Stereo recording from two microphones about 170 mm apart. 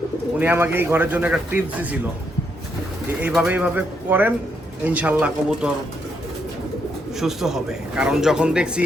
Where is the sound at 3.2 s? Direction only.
5° right (ahead or behind).